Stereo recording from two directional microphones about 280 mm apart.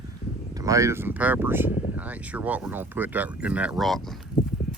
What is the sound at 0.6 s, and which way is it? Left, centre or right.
Speech, centre.